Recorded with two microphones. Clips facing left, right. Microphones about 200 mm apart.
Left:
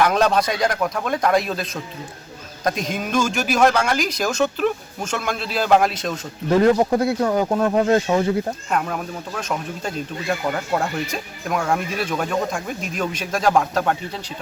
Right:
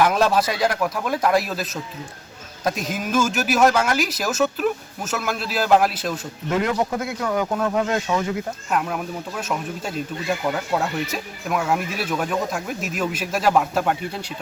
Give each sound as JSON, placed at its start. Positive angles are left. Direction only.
{"t": 0.0, "sound": "speech", "side_deg": -5}
{"t": 6.5, "sound": "speech", "side_deg": 35}
{"t": 8.7, "sound": "speech", "side_deg": -5}